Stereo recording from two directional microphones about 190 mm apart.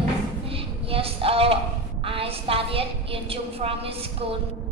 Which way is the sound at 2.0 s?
30° right (ahead or behind).